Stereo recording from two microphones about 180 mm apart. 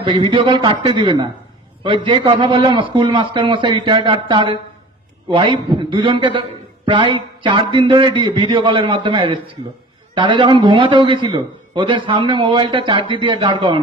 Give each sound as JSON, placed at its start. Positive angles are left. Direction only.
{"t": 0.0, "sound": "a man's voice", "side_deg": -30}